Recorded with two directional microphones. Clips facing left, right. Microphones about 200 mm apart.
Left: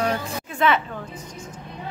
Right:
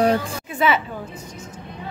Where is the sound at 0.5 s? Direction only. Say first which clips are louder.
Right 1 dB; 5° right (ahead or behind).